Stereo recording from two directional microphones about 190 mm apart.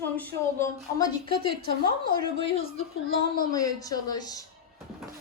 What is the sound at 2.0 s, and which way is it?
A woman's voice, 25° left (ahead or behind).